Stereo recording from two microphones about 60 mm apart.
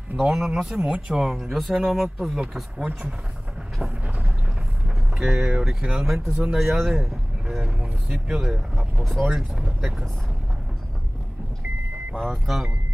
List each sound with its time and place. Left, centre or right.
0.2 s speech: centre
0.7 s speech: centre
1.2 s speech: centre
4.8 s vehicle: centre
5.6 s speech: centre
12.2 s speech: centre